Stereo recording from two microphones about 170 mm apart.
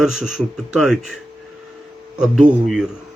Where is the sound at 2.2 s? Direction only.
5° right (ahead or behind).